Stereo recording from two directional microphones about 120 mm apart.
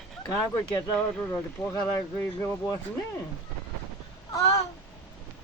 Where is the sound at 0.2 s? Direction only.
30° left (ahead or behind).